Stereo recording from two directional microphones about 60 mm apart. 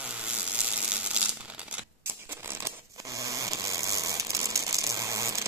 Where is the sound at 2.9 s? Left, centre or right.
Right.